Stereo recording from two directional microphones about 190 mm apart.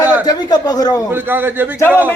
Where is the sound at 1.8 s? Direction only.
10° left (ahead or behind).